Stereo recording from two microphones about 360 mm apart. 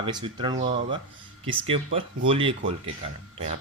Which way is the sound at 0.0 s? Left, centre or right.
Centre.